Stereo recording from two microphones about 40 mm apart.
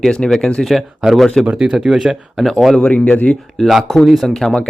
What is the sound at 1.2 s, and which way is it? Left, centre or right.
Speech, centre.